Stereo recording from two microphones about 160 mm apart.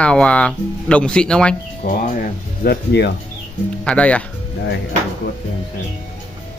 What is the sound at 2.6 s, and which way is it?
Speech, 90° left.